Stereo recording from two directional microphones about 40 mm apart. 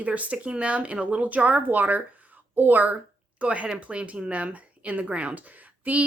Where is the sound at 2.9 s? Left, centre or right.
Right.